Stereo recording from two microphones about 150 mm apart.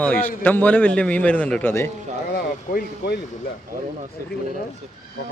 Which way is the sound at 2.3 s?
90° left.